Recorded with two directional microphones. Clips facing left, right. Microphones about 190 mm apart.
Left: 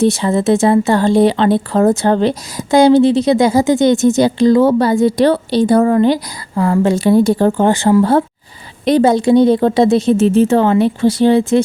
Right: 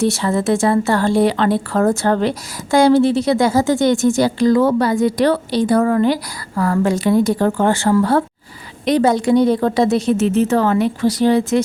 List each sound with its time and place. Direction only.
0.0 s speech: 20° left (ahead or behind)